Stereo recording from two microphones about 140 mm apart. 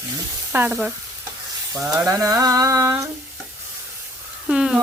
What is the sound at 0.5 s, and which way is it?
Speech, 10° right (ahead or behind).